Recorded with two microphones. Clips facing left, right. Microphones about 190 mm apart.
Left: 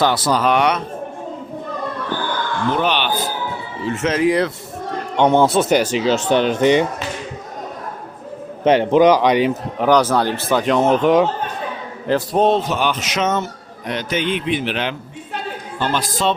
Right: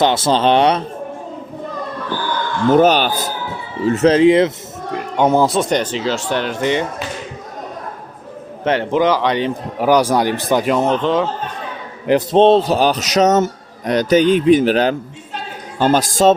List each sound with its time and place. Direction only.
0.0 s speech: 25° right (ahead or behind)
2.7 s speech: 40° right (ahead or behind); by 4.5 s 20° right (ahead or behind)
5.1 s speech: 5° right (ahead or behind); by 6.8 s 20° left (ahead or behind)
8.6 s speech: 15° left (ahead or behind)
9.7 s speech: 10° right (ahead or behind)
10.7 s speech: centre (ahead or behind)
12.0 s speech: 20° right (ahead or behind); by 16.3 s 45° right (ahead or behind)